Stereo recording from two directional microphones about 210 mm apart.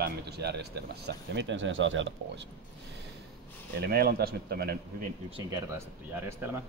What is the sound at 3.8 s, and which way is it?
Speech, 50° right (ahead or behind).